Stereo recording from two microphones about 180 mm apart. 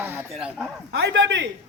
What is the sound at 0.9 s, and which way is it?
Speech, 75° right (ahead or behind).